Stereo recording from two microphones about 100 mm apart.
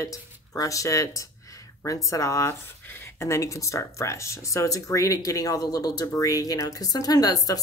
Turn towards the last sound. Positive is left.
turn(degrees=35)  # may be behind; listen again after turning